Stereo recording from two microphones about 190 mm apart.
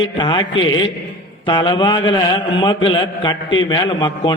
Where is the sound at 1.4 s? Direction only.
25° left (ahead or behind).